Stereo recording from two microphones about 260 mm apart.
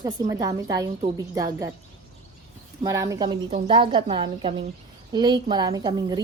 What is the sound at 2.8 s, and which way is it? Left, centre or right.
A woman's voice, centre.